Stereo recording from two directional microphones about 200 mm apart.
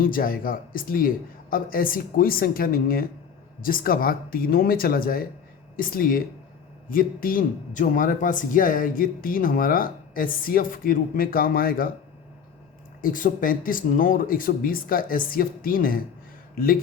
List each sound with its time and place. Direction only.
0.0 s speech: 45° left (ahead or behind)
13.0 s speech: 45° left (ahead or behind)